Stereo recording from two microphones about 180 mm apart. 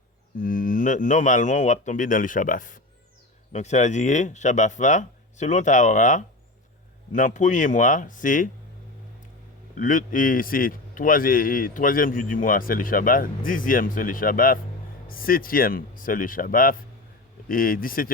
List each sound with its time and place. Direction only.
0.3 s a man's voice: 45° left (ahead or behind)
9.7 s a man's voice: 45° left (ahead or behind)